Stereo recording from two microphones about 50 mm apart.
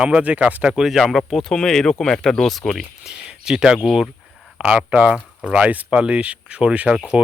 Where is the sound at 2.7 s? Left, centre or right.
Centre.